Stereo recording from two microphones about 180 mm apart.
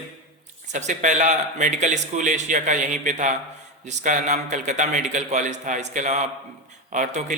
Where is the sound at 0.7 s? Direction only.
40° right (ahead or behind).